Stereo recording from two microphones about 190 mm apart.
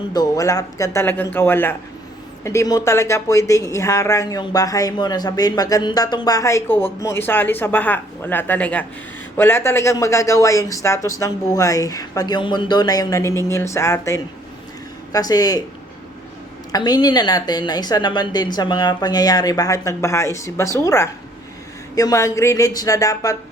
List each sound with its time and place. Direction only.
0.1 s a woman's voice: 20° left (ahead or behind)
16.7 s a woman's voice: 20° left (ahead or behind)